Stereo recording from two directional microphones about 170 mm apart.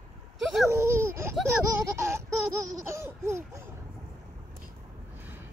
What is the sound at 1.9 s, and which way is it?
Laughter, 15° right (ahead or behind).